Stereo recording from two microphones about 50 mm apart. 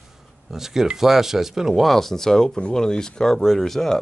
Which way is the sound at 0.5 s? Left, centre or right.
Centre.